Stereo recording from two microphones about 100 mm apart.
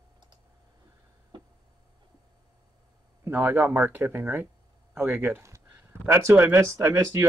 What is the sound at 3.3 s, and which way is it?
Speech, 15° right (ahead or behind).